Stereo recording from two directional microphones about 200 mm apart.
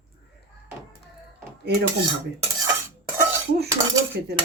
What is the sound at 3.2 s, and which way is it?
Cutlery, 55° right (ahead or behind).